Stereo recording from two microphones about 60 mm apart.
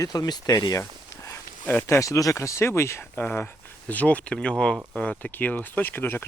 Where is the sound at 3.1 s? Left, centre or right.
Left.